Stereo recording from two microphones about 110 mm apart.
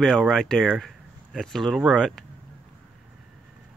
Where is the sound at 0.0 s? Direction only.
Centre (ahead or behind).